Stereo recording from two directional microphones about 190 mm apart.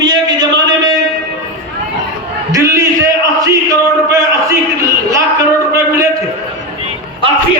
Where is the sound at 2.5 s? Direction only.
15° right (ahead or behind).